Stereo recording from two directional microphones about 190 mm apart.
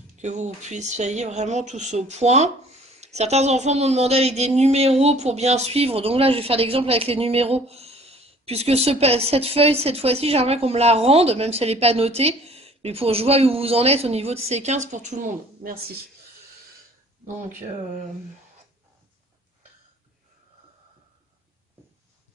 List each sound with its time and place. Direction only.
0.2 s speech: 40° right (ahead or behind)